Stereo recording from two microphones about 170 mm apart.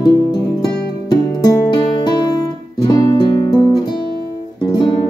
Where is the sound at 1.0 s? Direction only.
20° left (ahead or behind).